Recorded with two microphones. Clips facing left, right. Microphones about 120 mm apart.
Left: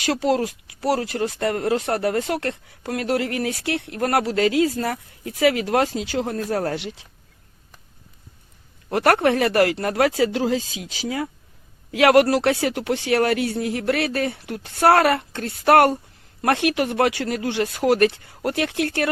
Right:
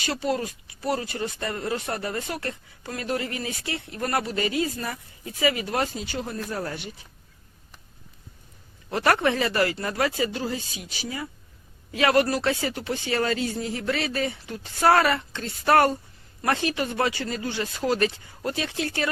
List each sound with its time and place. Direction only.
0.0 s speech: 90° left
8.9 s speech: 55° left (ahead or behind); by 11.3 s 90° left
11.9 s speech: 75° left (ahead or behind)